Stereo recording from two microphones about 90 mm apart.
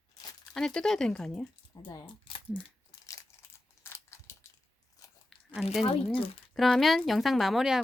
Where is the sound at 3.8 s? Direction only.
30° left (ahead or behind).